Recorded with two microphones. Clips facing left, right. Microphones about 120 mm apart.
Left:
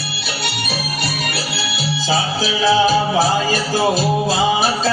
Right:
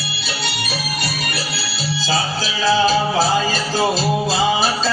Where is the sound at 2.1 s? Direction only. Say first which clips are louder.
Left 3 dB; 15° left (ahead or behind).